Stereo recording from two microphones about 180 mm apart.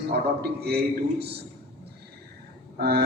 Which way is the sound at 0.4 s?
60° right (ahead or behind).